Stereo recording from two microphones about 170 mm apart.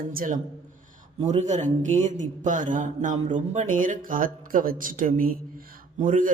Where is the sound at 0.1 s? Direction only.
55° right (ahead or behind).